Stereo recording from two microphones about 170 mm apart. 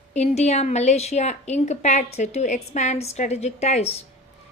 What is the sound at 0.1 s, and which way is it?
A woman's voice, 40° left (ahead or behind).